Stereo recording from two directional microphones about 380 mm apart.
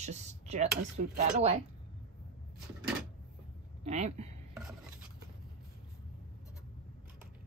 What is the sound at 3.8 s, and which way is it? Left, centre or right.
Speech, centre.